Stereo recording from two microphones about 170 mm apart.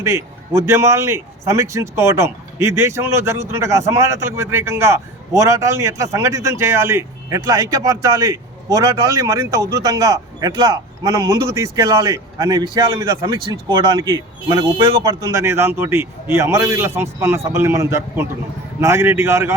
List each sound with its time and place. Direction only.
0.5 s a man's voice: 15° right (ahead or behind)